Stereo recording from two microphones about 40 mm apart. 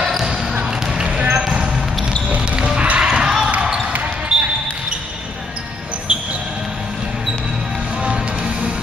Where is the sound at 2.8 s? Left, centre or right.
Right.